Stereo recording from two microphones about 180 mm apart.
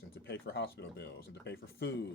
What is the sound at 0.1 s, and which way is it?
Speech, 65° left (ahead or behind).